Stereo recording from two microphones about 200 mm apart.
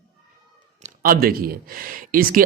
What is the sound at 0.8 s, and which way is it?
A man's voice, 45° right (ahead or behind).